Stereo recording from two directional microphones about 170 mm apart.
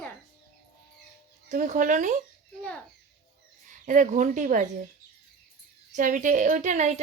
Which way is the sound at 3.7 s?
50° right (ahead or behind).